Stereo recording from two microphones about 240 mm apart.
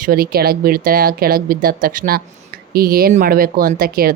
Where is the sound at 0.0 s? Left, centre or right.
Right.